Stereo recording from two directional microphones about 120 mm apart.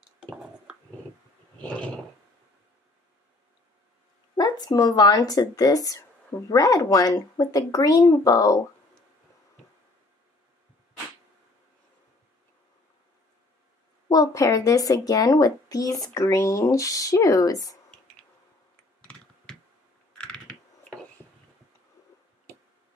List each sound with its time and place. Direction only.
1.6 s a sound: 10° left (ahead or behind)
4.4 s speech: 30° left (ahead or behind)
14.0 s speech: 30° left (ahead or behind)
18.9 s computer keyboard: 10° left (ahead or behind)